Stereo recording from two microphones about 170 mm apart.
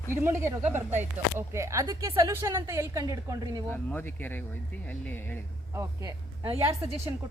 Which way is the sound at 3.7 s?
10° left (ahead or behind).